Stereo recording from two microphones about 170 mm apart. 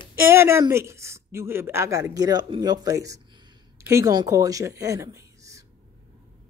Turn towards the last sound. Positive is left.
turn(degrees=-20)  # may be behind; listen again after turning